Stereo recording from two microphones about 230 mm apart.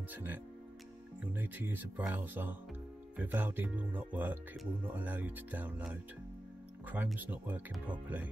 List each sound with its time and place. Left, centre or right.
0.1 s speech: centre